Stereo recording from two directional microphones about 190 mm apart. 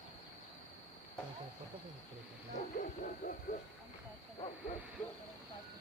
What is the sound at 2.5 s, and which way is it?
Hoot, 45° left (ahead or behind).